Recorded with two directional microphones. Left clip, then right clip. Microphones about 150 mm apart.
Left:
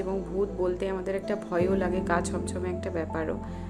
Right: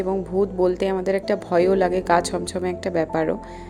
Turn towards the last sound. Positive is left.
turn(degrees=-45)  # may be behind; listen again after turning